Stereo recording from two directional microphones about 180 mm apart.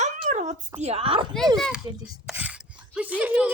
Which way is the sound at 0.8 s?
35° right (ahead or behind).